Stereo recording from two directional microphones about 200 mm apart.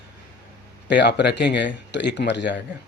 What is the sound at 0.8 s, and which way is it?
Speech, 60° left (ahead or behind).